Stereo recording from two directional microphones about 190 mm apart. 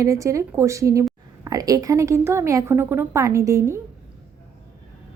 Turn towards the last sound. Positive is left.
turn(degrees=-15)  # may be behind; listen again after turning